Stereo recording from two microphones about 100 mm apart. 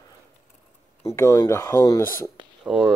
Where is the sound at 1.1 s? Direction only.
30° left (ahead or behind).